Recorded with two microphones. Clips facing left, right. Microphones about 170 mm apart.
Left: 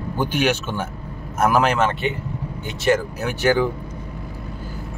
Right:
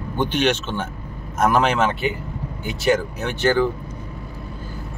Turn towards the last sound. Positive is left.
turn(degrees=10)  # may be behind; listen again after turning